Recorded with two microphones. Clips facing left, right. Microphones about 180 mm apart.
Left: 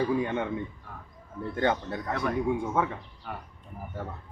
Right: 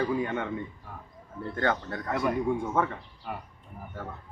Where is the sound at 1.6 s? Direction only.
15° left (ahead or behind).